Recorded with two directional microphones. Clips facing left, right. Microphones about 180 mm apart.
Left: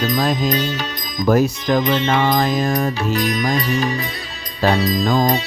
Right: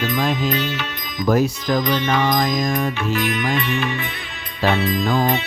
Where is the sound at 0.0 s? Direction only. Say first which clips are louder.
Left 2 dB; 40° left (ahead or behind).